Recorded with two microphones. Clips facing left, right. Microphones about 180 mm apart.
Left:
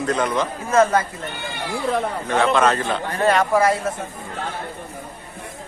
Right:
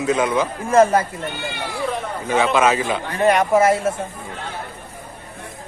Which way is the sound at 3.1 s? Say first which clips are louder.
Right 2 dB; 20° right (ahead or behind).